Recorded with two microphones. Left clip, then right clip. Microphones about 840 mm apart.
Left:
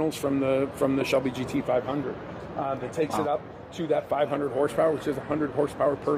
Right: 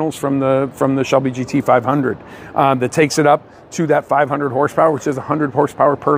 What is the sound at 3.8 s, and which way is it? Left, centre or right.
Speech, right.